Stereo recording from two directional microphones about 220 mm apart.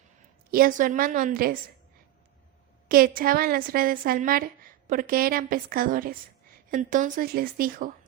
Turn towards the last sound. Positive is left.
turn(degrees=-40)  # may be behind; listen again after turning